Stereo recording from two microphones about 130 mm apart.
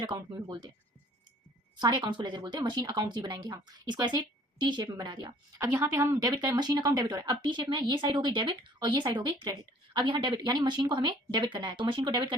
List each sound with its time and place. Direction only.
0.0 s a woman's voice: 35° right (ahead or behind)
1.8 s a woman's voice: 35° right (ahead or behind)
5.5 s a woman's voice: 20° right (ahead or behind); by 12.3 s 35° right (ahead or behind)